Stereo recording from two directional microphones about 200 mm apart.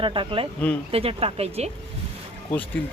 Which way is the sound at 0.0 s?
25° right (ahead or behind).